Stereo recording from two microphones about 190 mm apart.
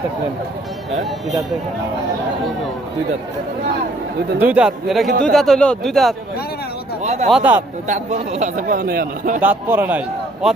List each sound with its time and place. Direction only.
4.4 s speech: 5° right (ahead or behind)
7.0 s a sound: 35° right (ahead or behind)
7.3 s speech: 5° right (ahead or behind)
7.9 s a man's voice: 35° right (ahead or behind)
9.4 s a man's voice: 10° right (ahead or behind)